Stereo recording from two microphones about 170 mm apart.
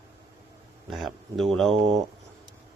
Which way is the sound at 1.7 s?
40° right (ahead or behind).